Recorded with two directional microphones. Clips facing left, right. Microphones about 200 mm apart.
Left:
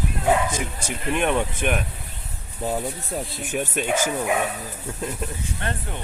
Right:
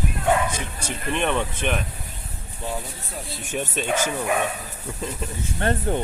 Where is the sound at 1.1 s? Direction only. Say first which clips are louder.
Left 2 dB; 10° left (ahead or behind).